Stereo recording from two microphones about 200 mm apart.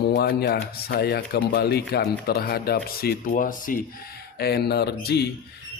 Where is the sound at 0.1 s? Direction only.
55° left (ahead or behind).